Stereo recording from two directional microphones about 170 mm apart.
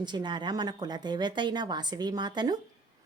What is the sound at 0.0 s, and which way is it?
A woman's voice, 25° right (ahead or behind).